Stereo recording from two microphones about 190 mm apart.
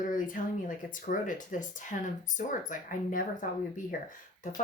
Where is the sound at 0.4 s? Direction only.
45° left (ahead or behind).